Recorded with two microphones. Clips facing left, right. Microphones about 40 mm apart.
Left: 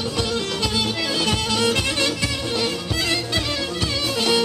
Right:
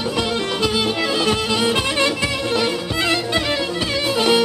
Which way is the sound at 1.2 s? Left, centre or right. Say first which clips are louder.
Right 1 dB; centre.